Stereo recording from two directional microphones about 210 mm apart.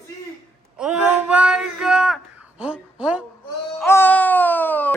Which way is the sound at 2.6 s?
5° right (ahead or behind).